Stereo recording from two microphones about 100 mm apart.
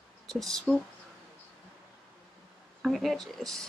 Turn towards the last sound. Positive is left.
turn(degrees=5)  # may be behind; listen again after turning